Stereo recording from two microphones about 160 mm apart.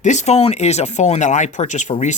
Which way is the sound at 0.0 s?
45° left (ahead or behind).